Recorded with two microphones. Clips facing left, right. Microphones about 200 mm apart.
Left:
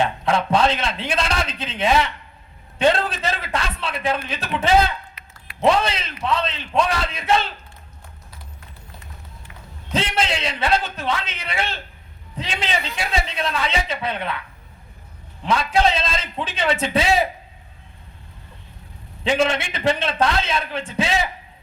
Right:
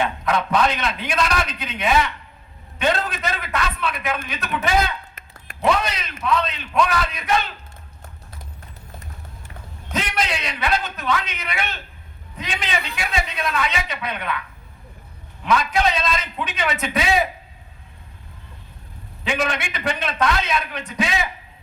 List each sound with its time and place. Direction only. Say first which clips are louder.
0.3 s a man's voice: left 1 dB; 30° left (ahead or behind)
5.5 s a sound: left 5 dB; 45° right (ahead or behind)
5.8 s a man's voice: left 2 dB; 25° left (ahead or behind)
9.9 s a man's voice: left 2 dB; 30° left (ahead or behind)
15.4 s a man's voice: left 1 dB; 30° left (ahead or behind)
19.2 s a man's voice: left 4 dB; 30° left (ahead or behind)